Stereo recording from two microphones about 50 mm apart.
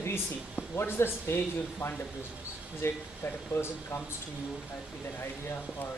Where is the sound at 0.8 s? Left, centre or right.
Left.